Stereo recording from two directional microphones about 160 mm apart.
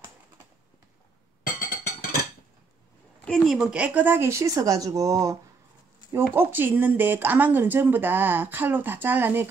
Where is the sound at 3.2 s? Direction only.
Centre (ahead or behind).